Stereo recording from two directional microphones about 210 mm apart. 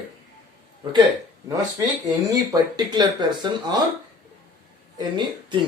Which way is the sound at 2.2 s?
15° right (ahead or behind).